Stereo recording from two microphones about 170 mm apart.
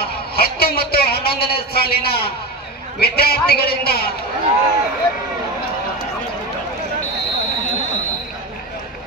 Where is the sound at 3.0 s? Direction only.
65° left (ahead or behind).